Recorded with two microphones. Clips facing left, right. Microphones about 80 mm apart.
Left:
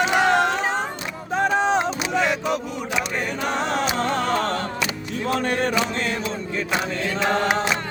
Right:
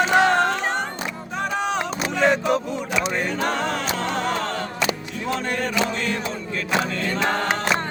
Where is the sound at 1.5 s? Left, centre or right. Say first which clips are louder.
Left 4 dB; left.